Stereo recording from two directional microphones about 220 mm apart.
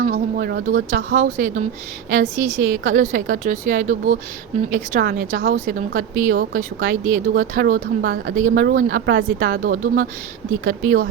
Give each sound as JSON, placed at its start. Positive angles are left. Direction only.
{"t": 0.0, "sound": "speech", "side_deg": -40}